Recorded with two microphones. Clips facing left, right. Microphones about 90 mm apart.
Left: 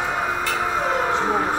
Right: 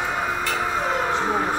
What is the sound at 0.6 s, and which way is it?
Siren, 50° left (ahead or behind).